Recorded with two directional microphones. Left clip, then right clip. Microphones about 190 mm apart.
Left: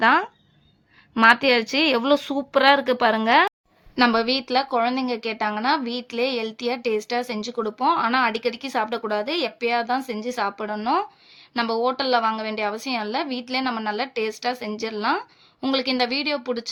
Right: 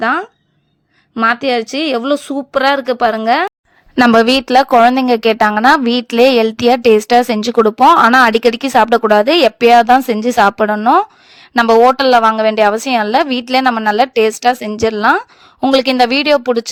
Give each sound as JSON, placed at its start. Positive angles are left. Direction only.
{"t": 0.0, "sound": "a woman's voice", "side_deg": -25}
{"t": 3.9, "sound": "a woman's voice", "side_deg": -50}